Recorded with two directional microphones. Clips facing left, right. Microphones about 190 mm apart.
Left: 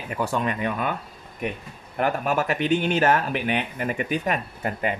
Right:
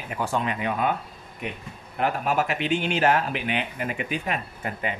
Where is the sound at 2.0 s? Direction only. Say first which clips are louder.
Left 1 dB; 50° left (ahead or behind).